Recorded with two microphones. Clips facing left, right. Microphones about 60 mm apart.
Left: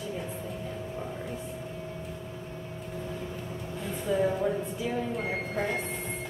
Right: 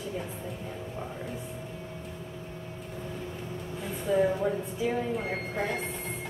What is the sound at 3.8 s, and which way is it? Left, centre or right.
Speech, centre.